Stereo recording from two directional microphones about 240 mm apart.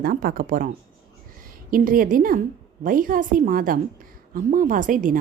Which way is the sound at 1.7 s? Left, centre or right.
Right.